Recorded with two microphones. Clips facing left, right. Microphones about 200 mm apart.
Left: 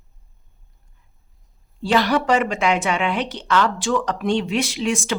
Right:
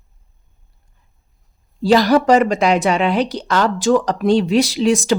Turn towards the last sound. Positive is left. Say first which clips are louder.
# right 7 dB
turn(degrees=-40)  # may be behind; listen again after turning